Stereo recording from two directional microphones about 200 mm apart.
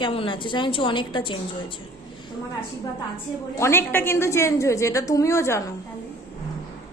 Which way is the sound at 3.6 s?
10° left (ahead or behind).